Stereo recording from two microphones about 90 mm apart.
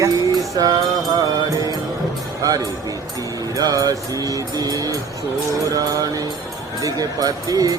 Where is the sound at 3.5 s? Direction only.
40° right (ahead or behind).